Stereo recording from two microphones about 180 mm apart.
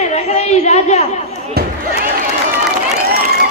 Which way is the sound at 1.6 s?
60° right (ahead or behind).